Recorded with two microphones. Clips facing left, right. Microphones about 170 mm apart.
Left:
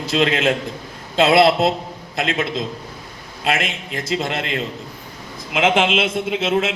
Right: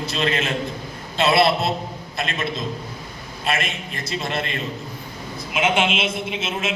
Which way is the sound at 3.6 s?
90° left.